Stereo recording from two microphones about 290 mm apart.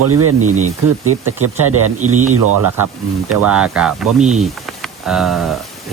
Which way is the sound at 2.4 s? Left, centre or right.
Right.